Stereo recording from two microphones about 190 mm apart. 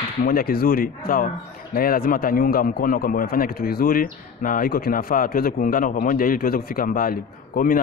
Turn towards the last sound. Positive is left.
turn(degrees=50)  # may be behind; listen again after turning